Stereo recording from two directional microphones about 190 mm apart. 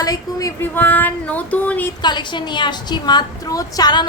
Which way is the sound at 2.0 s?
25° left (ahead or behind).